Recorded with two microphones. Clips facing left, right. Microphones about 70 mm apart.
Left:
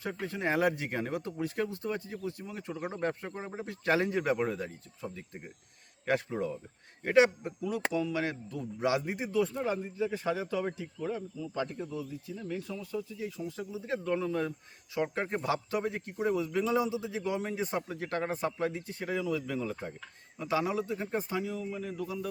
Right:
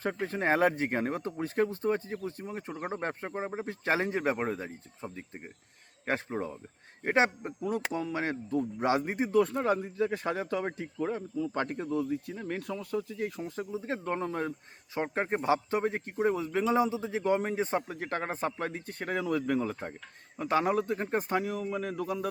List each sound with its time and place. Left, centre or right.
0.0 s speech: right